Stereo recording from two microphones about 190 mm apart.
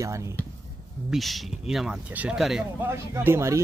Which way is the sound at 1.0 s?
Centre (ahead or behind).